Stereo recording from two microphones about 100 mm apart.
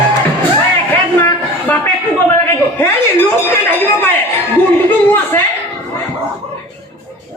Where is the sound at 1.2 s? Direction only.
15° left (ahead or behind).